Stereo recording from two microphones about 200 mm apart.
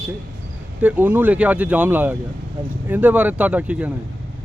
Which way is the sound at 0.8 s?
10° right (ahead or behind).